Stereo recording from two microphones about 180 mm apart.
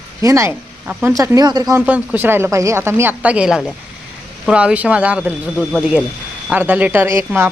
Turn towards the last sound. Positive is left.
turn(degrees=-15)  # may be behind; listen again after turning